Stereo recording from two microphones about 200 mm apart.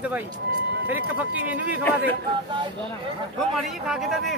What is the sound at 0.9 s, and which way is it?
Speech, 10° right (ahead or behind).